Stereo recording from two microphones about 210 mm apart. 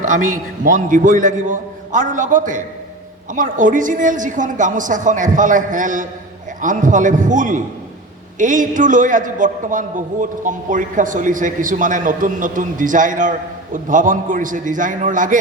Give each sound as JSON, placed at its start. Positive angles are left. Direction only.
{"t": 0.6, "sound": "a man's voice", "side_deg": -40}